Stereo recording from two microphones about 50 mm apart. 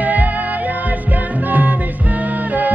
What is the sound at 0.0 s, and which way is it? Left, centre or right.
Music, right.